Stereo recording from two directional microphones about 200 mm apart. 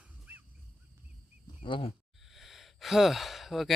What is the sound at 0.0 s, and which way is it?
Dog, 5° right (ahead or behind).